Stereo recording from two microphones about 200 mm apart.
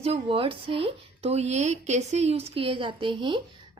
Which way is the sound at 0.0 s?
30° right (ahead or behind).